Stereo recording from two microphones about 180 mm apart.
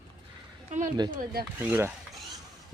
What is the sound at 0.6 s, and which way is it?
Speech, 40° right (ahead or behind).